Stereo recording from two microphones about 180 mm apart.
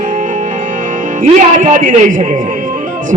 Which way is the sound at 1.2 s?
45° right (ahead or behind).